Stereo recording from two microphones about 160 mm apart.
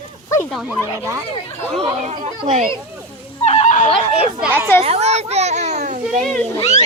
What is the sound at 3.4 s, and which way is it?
Neigh, 45° left (ahead or behind).